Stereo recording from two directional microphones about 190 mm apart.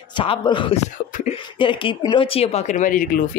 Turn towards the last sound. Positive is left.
turn(degrees=45)  # may be behind; listen again after turning